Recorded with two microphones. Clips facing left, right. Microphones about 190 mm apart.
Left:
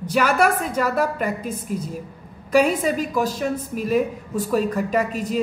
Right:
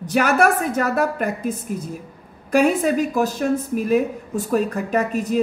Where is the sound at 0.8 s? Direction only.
50° right (ahead or behind).